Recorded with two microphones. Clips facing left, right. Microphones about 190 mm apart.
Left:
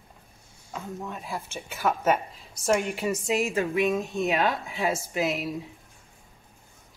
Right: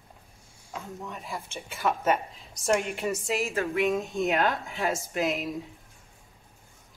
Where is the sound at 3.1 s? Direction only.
15° left (ahead or behind).